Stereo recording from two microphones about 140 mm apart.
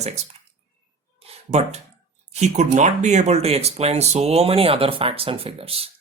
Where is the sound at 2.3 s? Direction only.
55° right (ahead or behind).